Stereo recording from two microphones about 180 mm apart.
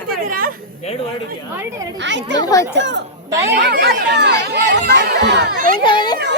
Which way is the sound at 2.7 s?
75° right (ahead or behind).